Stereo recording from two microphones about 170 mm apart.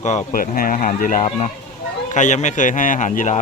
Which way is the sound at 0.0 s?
45° left (ahead or behind).